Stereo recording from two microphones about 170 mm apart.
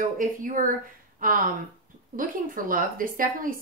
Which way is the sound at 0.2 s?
50° right (ahead or behind).